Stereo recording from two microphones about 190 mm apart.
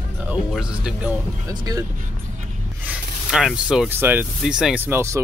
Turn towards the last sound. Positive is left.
turn(degrees=-15)  # may be behind; listen again after turning